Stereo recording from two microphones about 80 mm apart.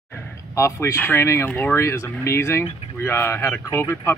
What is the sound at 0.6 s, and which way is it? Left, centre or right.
Speech, left.